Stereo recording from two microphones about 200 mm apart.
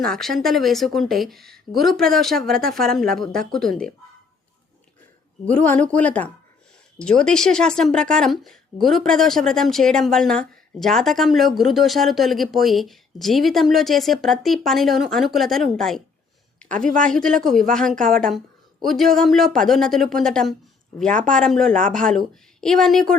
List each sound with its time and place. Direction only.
0.0 s speech: centre (ahead or behind)
5.5 s speech: 5° left (ahead or behind)
16.6 s a sound: 5° left (ahead or behind)
17.0 s speech: 5° left (ahead or behind)